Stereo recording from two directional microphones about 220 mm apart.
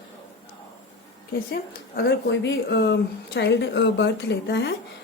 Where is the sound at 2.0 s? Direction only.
55° left (ahead or behind).